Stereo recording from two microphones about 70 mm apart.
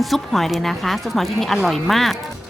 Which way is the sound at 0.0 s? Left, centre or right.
Centre.